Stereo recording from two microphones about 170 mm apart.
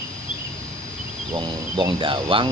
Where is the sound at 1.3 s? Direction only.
25° right (ahead or behind).